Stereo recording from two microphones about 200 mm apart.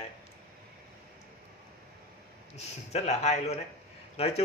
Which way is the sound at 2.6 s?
35° left (ahead or behind).